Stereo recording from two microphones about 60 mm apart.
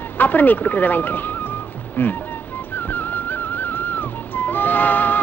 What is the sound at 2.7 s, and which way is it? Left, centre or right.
Music, left.